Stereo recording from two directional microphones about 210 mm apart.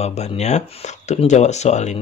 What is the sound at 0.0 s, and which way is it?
Speech, 30° left (ahead or behind).